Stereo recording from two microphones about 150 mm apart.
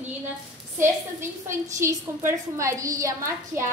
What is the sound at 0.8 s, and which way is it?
Speech, 15° right (ahead or behind).